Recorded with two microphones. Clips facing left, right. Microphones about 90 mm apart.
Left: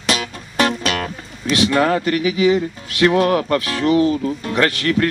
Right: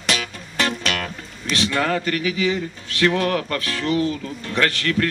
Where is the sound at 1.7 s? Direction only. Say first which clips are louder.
Left 5 dB; 25° left (ahead or behind).